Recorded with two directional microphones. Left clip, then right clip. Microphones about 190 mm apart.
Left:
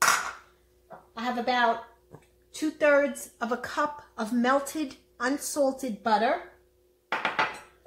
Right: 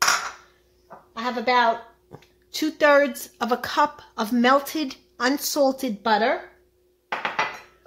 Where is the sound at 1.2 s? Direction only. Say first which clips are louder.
Right 5 dB; 50° right (ahead or behind).